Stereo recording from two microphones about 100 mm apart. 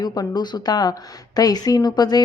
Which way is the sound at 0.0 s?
40° left (ahead or behind).